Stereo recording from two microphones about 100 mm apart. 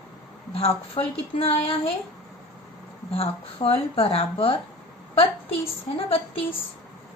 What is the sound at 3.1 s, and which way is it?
A woman's voice, 75° left (ahead or behind).